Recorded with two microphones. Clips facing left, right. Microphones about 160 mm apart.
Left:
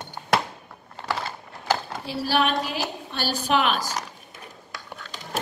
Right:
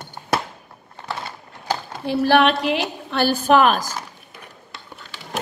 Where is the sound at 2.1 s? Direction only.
55° right (ahead or behind).